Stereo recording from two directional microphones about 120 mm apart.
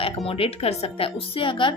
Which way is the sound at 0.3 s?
50° left (ahead or behind).